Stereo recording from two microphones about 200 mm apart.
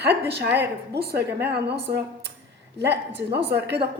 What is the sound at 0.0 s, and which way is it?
A woman's voice, 55° right (ahead or behind).